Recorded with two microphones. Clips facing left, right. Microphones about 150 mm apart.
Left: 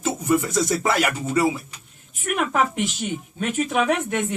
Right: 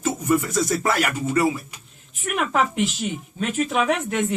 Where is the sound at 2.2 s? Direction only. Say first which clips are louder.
Even; centre (ahead or behind).